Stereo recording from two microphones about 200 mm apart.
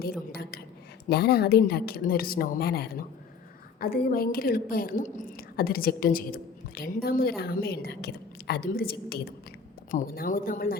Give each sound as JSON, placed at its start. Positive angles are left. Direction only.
{"t": 0.0, "sound": "a woman's voice", "side_deg": 50}